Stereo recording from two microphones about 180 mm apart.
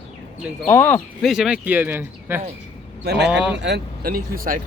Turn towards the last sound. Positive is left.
turn(degrees=-50)  # may be behind; listen again after turning